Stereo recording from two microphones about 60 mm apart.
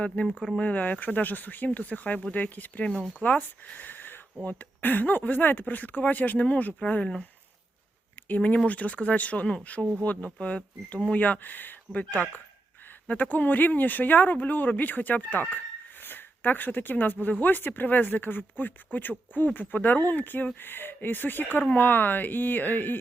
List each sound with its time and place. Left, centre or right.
0.2 s speech: left
8.4 s speech: left